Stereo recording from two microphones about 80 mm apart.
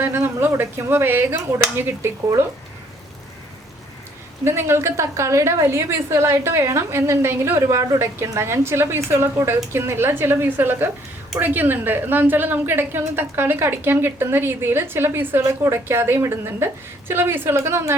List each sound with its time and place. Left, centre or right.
0.0 s a woman's voice: right
4.4 s a woman's voice: right